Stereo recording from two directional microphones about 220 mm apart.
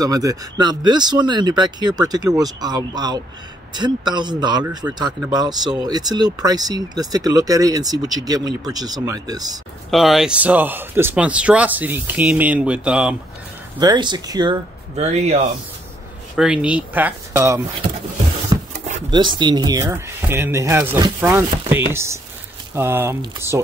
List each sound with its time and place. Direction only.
0.0 s speech: 15° right (ahead or behind)
9.8 s speech: centre (ahead or behind)
13.7 s speech: 20° right (ahead or behind)
16.3 s speech: 5° right (ahead or behind)
18.5 s a sound: 20° right (ahead or behind)
19.0 s speech: 20° right (ahead or behind)